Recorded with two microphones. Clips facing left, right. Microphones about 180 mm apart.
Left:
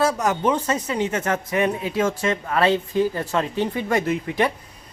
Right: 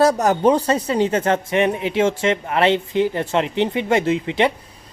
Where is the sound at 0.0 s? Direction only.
40° right (ahead or behind).